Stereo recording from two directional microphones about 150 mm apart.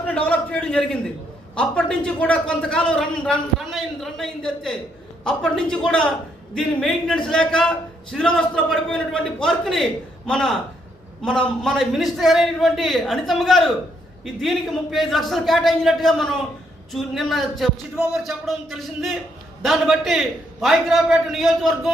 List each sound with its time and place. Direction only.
0.1 s a man's voice: 10° left (ahead or behind)